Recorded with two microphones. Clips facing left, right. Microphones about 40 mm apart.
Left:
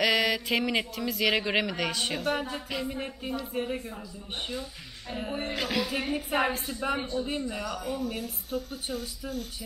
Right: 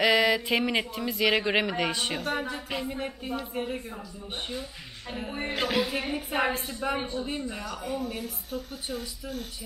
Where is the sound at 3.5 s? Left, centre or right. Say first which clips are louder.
Left 2 dB; centre.